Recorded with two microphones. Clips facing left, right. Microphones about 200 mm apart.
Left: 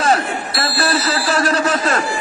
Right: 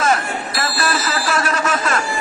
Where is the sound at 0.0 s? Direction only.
35° left (ahead or behind).